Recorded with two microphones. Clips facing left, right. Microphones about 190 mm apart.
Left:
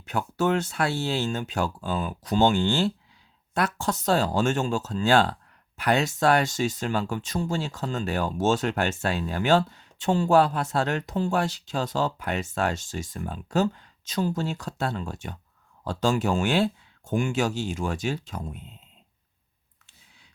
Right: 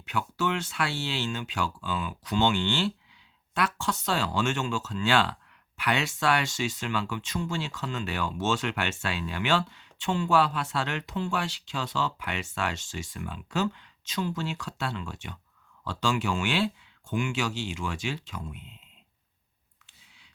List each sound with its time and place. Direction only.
0.0 s speech: 45° left (ahead or behind)